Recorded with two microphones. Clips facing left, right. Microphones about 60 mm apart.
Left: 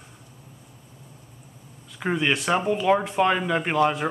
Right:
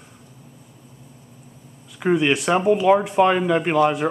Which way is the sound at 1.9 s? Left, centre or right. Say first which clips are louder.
Right 5 dB; centre.